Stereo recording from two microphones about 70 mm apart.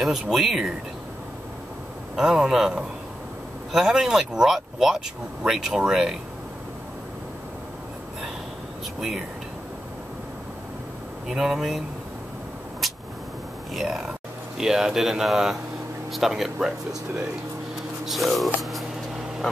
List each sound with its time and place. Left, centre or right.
0.0 s speech: centre
2.1 s speech: centre
11.2 s speech: centre
12.8 s vehicle: centre
13.7 s speech: centre
18.0 s speech: centre